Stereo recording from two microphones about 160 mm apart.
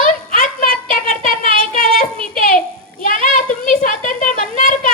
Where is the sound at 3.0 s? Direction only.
55° left (ahead or behind).